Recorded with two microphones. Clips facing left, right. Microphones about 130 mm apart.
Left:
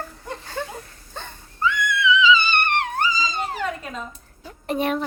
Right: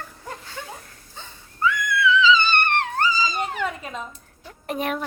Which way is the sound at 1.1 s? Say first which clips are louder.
Left 6 dB; 60° left (ahead or behind).